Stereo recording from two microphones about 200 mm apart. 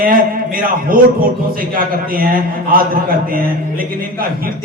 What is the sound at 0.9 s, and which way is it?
A man's voice, 45° right (ahead or behind).